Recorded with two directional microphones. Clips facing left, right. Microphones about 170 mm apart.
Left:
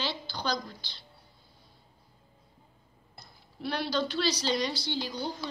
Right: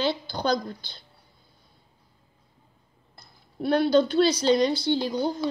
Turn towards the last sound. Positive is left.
turn(degrees=-50)  # may be behind; listen again after turning